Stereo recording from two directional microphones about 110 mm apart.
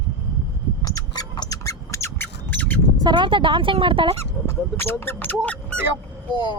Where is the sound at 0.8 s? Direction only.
35° left (ahead or behind).